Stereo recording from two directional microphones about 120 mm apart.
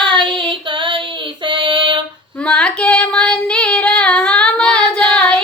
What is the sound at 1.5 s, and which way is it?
Female singing, 45° right (ahead or behind).